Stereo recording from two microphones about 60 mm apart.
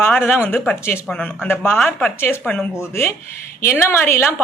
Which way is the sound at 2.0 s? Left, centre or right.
Left.